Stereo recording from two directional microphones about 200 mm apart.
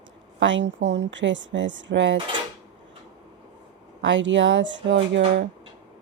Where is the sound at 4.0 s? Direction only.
65° right (ahead or behind).